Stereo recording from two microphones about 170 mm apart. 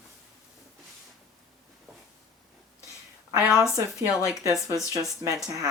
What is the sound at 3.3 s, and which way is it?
Speech, 10° right (ahead or behind).